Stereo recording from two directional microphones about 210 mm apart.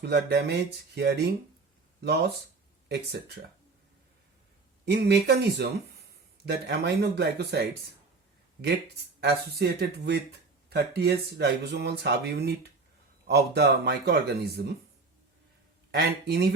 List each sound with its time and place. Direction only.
0.0 s speech: 55° right (ahead or behind)
4.9 s speech: 50° right (ahead or behind)
9.2 s speech: 50° right (ahead or behind)
16.0 s speech: 50° right (ahead or behind)